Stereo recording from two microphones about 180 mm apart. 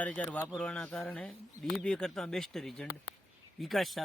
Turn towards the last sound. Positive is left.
turn(degrees=0)  # may be behind; listen again after turning